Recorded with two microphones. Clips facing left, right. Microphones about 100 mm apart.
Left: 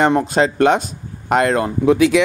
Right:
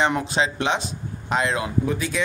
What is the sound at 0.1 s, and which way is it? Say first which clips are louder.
Speech: left 7 dB; 45° left (ahead or behind).